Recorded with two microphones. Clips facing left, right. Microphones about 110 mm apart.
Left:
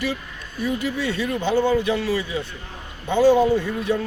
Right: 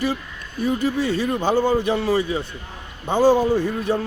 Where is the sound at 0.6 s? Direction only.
45° right (ahead or behind).